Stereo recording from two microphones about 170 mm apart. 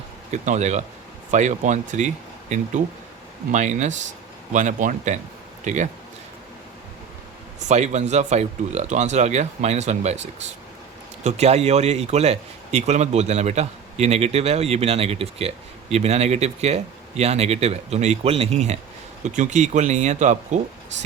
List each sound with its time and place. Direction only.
0.3 s speech: 45° right (ahead or behind)
3.5 s speech: 45° right (ahead or behind)
7.7 s speech: 40° right (ahead or behind)
11.2 s speech: 40° right (ahead or behind)